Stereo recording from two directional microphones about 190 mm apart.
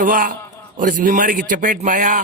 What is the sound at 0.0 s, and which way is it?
Speech, 45° right (ahead or behind).